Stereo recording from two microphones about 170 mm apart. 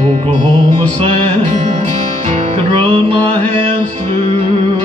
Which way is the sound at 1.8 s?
35° right (ahead or behind).